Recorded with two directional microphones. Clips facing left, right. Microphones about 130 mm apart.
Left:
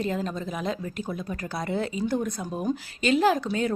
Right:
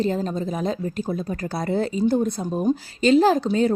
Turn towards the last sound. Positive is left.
turn(degrees=-30)  # may be behind; listen again after turning